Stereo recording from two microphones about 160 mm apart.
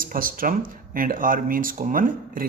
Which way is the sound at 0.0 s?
60° right (ahead or behind).